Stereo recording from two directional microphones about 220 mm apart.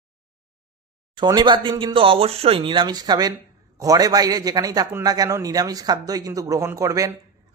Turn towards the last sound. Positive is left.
turn(degrees=-15)  # may be behind; listen again after turning